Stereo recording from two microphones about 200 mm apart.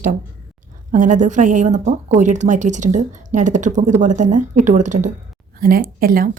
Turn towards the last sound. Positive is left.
turn(degrees=-45)  # may be behind; listen again after turning